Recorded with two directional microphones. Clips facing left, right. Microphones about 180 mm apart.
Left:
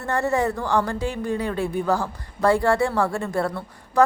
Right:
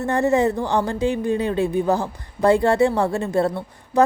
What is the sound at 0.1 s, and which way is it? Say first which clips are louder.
A woman's voice: right 3 dB; 20° right (ahead or behind).